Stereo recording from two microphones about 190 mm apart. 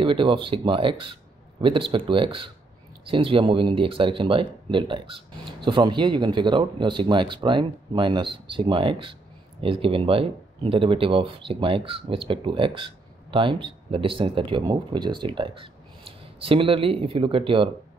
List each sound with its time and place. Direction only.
0.0 s speech: 25° right (ahead or behind)